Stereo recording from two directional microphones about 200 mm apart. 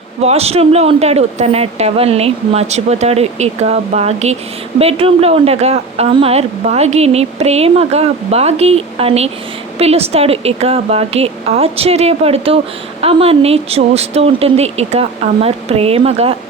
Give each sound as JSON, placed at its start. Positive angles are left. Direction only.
{"t": 0.2, "sound": "a woman's voice", "side_deg": -30}